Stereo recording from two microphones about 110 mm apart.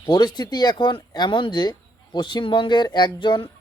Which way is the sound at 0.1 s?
40° left (ahead or behind).